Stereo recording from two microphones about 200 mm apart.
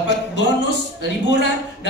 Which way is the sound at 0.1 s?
60° left (ahead or behind).